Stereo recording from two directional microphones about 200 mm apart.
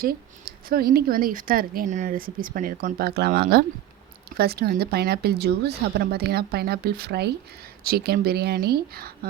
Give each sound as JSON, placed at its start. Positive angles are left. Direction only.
{"t": 0.0, "sound": "speech", "side_deg": -45}